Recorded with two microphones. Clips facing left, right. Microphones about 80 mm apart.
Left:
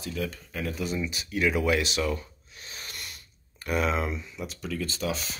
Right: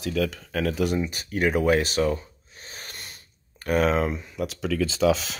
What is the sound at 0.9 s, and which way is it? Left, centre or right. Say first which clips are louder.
Speech: right 4 dB; right.